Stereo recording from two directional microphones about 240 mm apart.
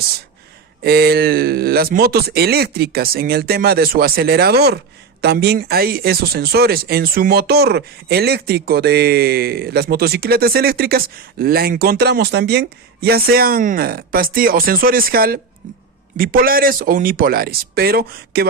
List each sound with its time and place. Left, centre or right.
0.9 s speech: right